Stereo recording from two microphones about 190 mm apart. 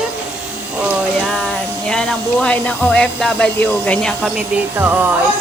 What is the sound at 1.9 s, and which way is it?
Speech, 5° left (ahead or behind).